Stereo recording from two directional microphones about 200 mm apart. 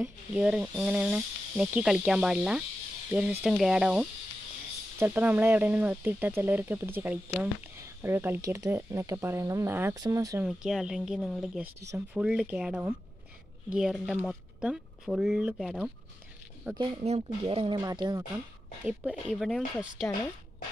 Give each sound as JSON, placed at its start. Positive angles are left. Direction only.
{"t": 0.0, "sound": "speech", "side_deg": -5}
{"t": 10.4, "sound": "speech", "side_deg": -5}
{"t": 11.8, "sound": "speech", "side_deg": -15}
{"t": 12.2, "sound": "speech", "side_deg": -5}
{"t": 16.7, "sound": "speech", "side_deg": -25}
{"t": 18.9, "sound": "speech", "side_deg": -5}